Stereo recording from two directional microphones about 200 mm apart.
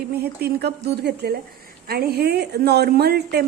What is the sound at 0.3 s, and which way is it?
A woman's voice, 55° right (ahead or behind).